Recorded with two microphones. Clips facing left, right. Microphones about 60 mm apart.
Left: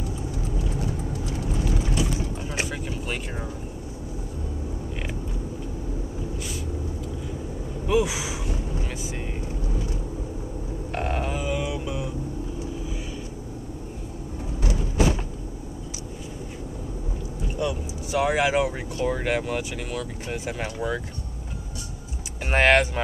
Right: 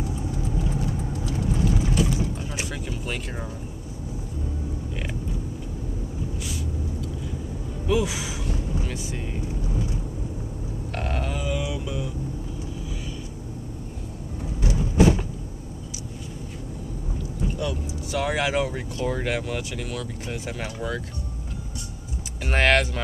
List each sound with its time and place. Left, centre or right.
1.5 s vehicle: centre
1.9 s a sound: centre
2.6 s vehicle: centre
7.8 s gasp: centre
10.9 s mantra: centre
17.6 s speech: centre
22.4 s speech: centre